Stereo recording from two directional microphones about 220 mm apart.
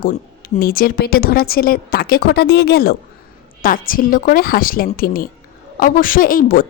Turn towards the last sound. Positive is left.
turn(degrees=40)  # may be behind; listen again after turning